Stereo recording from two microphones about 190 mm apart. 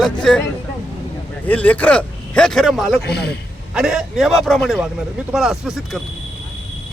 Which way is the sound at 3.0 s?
60° left (ahead or behind).